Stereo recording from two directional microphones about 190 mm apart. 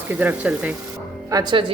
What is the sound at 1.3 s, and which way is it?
Speech, 25° right (ahead or behind).